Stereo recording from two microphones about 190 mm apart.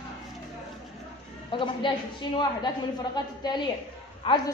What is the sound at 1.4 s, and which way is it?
A woman's voice, 25° left (ahead or behind).